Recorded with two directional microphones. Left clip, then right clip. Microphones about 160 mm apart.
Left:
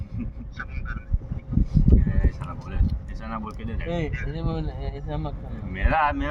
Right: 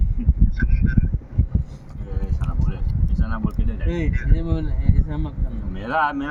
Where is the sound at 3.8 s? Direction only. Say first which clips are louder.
Right 1 dB; 30° left (ahead or behind).